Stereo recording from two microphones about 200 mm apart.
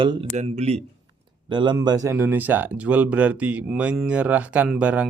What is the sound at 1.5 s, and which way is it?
Speech, 20° right (ahead or behind).